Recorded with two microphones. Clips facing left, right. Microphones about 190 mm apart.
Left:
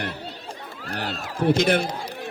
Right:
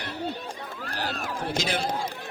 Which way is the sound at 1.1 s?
55° right (ahead or behind).